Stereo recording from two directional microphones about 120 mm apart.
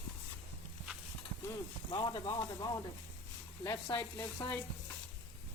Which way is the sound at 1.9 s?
40° left (ahead or behind).